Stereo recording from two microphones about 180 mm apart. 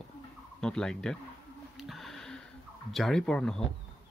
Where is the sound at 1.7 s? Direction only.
Centre (ahead or behind).